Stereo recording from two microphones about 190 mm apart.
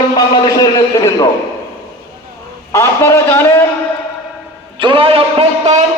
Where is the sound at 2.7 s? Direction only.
15° left (ahead or behind).